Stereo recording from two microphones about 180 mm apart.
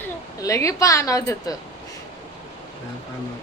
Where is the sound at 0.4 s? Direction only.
15° left (ahead or behind).